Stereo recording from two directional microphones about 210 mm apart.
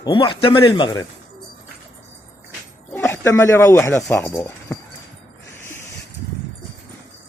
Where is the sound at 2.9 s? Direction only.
10° left (ahead or behind).